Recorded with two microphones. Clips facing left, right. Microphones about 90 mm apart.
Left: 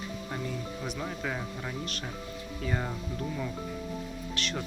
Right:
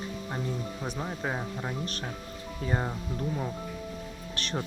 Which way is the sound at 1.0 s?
30° right (ahead or behind).